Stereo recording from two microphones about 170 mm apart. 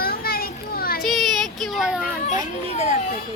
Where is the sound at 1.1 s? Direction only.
Centre (ahead or behind).